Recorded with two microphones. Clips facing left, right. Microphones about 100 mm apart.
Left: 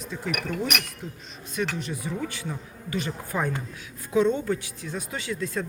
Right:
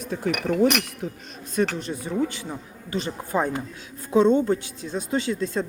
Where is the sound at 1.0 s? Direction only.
70° right (ahead or behind).